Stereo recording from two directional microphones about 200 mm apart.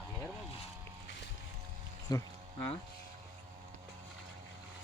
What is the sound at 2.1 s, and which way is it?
Speech, 20° left (ahead or behind).